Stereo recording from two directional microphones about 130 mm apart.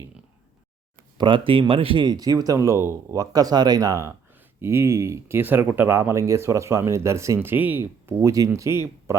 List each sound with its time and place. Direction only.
1.2 s speech: 40° right (ahead or behind); by 8.7 s 25° right (ahead or behind)